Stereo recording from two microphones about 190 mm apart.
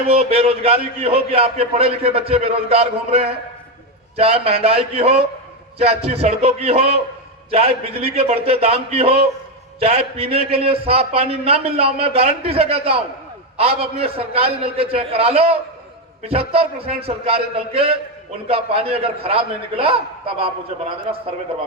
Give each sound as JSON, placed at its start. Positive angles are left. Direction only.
{"t": 0.1, "sound": "a man's voice", "side_deg": -30}